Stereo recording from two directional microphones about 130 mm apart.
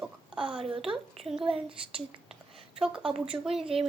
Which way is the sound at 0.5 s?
45° right (ahead or behind).